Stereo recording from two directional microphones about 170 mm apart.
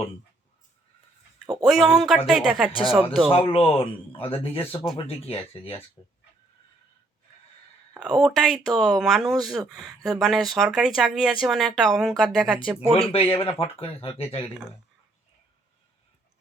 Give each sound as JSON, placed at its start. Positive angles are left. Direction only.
{"t": 1.6, "sound": "speech", "side_deg": 0}
{"t": 3.2, "sound": "speech", "side_deg": 35}
{"t": 7.9, "sound": "speech", "side_deg": -5}
{"t": 9.8, "sound": "speech", "side_deg": -20}
{"t": 10.2, "sound": "speech", "side_deg": 0}
{"t": 13.0, "sound": "speech", "side_deg": 30}